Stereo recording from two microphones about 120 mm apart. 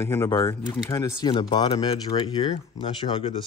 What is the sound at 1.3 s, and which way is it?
Speech, 40° left (ahead or behind).